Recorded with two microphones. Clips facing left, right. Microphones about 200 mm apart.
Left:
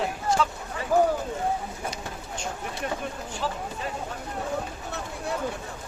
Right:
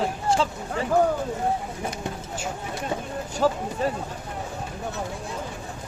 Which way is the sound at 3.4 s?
45° right (ahead or behind).